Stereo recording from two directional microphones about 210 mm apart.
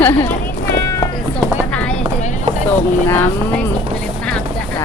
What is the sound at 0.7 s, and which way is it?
Run, 15° left (ahead or behind).